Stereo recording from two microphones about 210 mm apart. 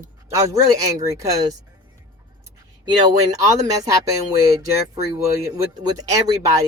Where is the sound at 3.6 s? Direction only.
15° right (ahead or behind).